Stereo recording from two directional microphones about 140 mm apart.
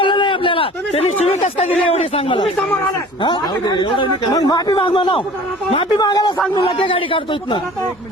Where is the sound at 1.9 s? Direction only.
45° left (ahead or behind).